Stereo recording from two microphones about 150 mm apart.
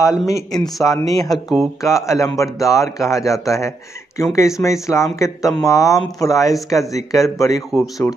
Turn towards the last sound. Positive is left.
turn(degrees=0)  # may be behind; listen again after turning